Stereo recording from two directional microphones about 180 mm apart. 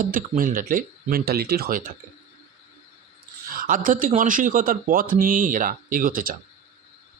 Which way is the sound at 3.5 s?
50° right (ahead or behind).